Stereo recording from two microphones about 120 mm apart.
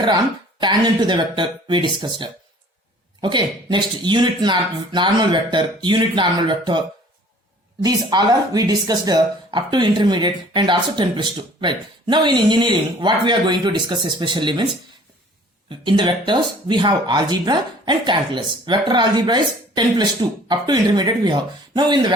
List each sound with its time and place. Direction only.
0.6 s speech: 40° right (ahead or behind)
15.8 s speech: 40° right (ahead or behind)